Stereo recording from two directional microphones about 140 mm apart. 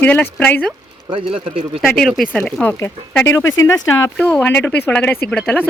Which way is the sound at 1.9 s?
5° left (ahead or behind).